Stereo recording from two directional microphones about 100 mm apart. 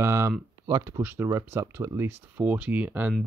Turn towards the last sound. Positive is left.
turn(degrees=-15)  # may be behind; listen again after turning